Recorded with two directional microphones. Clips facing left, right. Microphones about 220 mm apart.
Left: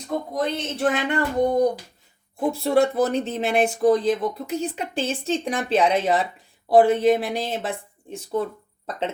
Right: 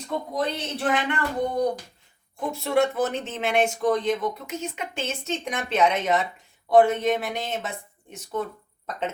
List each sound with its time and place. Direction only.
0.5 s speech: 45° left (ahead or behind)
2.5 s speech: 35° left (ahead or behind)